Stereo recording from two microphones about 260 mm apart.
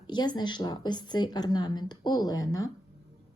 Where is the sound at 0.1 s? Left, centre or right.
Centre.